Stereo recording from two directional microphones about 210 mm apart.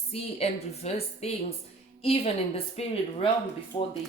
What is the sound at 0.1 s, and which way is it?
A woman's voice, 30° left (ahead or behind).